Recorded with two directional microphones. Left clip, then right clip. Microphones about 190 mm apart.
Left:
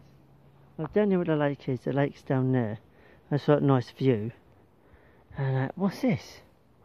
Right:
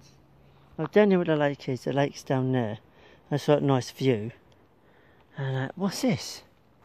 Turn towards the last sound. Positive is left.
turn(degrees=-10)  # may be behind; listen again after turning